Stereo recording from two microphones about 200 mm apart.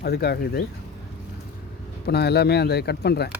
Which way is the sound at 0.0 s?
50° left (ahead or behind).